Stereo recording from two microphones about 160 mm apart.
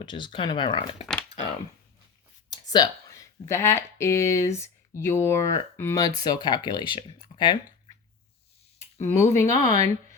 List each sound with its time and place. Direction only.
0.0 s speech: 30° left (ahead or behind)
2.5 s speech: 25° left (ahead or behind)
9.0 s speech: 15° left (ahead or behind)